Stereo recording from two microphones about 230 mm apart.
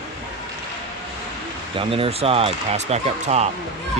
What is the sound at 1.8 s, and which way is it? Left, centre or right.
Speech, right.